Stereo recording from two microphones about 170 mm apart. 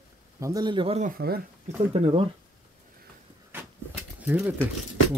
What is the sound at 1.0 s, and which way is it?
Speech, 55° right (ahead or behind).